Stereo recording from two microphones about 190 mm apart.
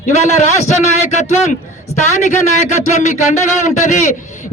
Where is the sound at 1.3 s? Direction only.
40° left (ahead or behind).